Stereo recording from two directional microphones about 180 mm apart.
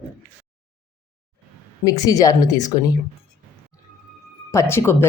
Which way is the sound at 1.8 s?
20° left (ahead or behind).